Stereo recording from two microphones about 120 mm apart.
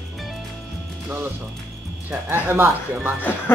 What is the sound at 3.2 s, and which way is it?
Speech, 15° left (ahead or behind).